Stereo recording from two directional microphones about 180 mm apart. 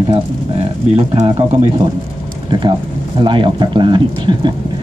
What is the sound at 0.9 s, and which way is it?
Speech, 35° right (ahead or behind).